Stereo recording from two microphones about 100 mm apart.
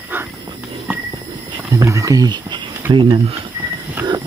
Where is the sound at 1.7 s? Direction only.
30° right (ahead or behind).